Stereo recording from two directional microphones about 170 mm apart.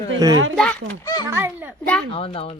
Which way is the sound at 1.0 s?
20° left (ahead or behind).